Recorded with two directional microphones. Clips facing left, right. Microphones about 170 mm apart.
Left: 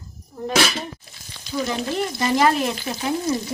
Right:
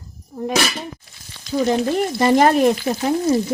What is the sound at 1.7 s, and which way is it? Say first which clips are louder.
Speech: right 7 dB; 45° right (ahead or behind).